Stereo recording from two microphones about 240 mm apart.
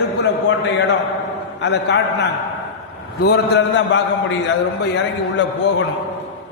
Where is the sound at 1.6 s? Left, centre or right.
Left.